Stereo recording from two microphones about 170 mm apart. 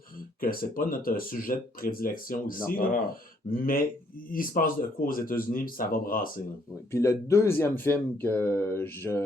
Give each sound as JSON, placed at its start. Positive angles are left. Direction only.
{"t": 0.3, "sound": "speech", "side_deg": 60}
{"t": 6.9, "sound": "speech", "side_deg": 15}